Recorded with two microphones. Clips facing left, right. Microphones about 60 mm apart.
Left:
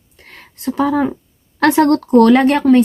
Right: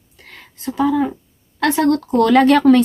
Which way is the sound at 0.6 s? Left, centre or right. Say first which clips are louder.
Left 2 dB; left.